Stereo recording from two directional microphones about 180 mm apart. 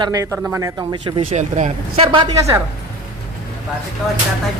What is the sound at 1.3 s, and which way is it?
Speech, 40° right (ahead or behind).